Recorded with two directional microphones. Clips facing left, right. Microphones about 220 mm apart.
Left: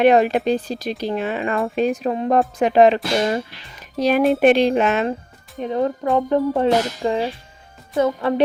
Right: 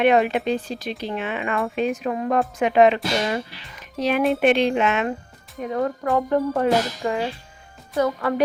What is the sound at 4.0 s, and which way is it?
Speech, 40° left (ahead or behind).